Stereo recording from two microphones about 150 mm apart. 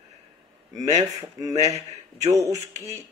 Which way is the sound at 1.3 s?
20° right (ahead or behind).